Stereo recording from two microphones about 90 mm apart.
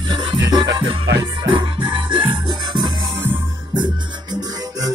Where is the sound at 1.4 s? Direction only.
65° right (ahead or behind).